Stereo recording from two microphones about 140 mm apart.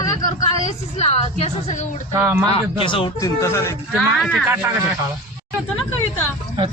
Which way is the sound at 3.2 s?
20° left (ahead or behind).